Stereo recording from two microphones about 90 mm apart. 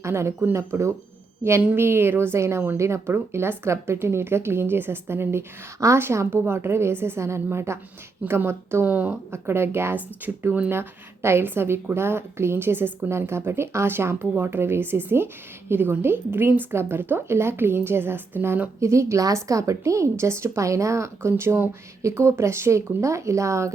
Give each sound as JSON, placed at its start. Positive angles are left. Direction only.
{"t": 0.0, "sound": "a woman's voice", "side_deg": -30}